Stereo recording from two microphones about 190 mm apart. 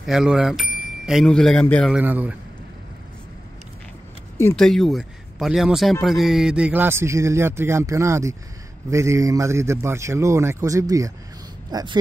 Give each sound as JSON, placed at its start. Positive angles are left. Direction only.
{"t": 0.0, "sound": "speech", "side_deg": -5}
{"t": 2.0, "sound": "a man's voice", "side_deg": -10}
{"t": 4.4, "sound": "a man's voice", "side_deg": 5}